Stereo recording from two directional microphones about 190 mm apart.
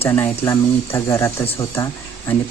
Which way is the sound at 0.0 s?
10° left (ahead or behind).